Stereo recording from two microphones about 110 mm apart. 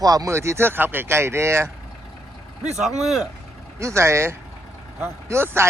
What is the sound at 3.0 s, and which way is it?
Speech, centre (ahead or behind).